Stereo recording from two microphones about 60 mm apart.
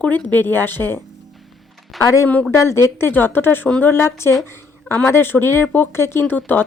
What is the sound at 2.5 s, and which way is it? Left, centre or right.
Speech, left.